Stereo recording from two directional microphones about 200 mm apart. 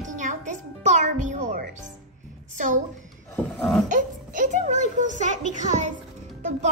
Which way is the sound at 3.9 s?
40° right (ahead or behind).